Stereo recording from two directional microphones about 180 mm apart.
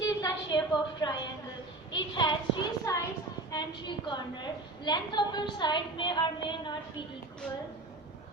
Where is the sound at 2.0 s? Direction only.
25° left (ahead or behind).